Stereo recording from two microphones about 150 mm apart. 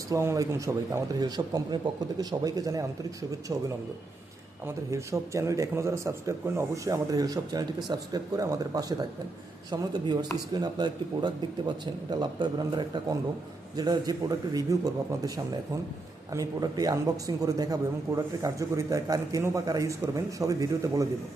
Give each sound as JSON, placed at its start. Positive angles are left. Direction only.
{"t": 0.1, "sound": "a man's voice", "side_deg": -20}
{"t": 16.3, "sound": "a man's voice", "side_deg": -25}